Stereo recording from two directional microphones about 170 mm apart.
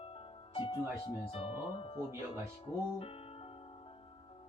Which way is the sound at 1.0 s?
35° left (ahead or behind).